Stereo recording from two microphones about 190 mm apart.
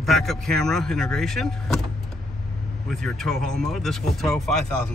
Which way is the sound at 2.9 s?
Centre (ahead or behind).